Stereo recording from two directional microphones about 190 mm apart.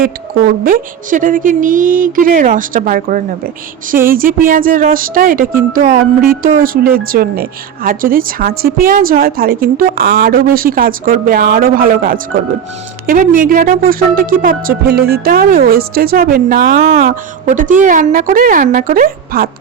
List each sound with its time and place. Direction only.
0.0 s a woman's voice: 50° right (ahead or behind)